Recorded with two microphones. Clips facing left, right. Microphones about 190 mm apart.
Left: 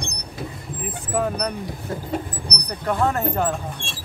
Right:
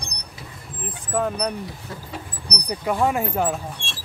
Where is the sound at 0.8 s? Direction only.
5° left (ahead or behind).